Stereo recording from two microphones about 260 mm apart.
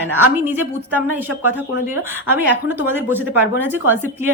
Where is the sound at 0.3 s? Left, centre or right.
Centre.